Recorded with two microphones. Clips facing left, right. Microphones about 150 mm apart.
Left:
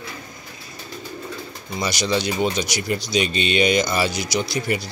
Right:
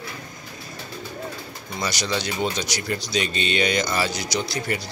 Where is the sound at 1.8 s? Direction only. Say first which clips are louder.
Left 4 dB; 15° left (ahead or behind).